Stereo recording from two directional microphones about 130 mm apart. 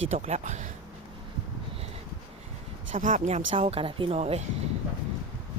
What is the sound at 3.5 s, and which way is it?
Speech, 45° right (ahead or behind).